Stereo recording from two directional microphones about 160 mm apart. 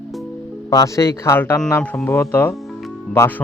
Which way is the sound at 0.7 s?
20° left (ahead or behind).